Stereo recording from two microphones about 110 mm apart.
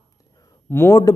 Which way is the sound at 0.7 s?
20° left (ahead or behind).